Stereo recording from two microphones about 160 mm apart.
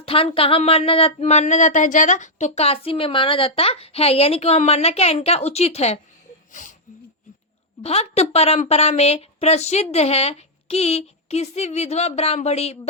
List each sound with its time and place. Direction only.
0.0 s speech: 35° left (ahead or behind)
6.5 s a sound: 55° left (ahead or behind)
7.8 s speech: 40° left (ahead or behind)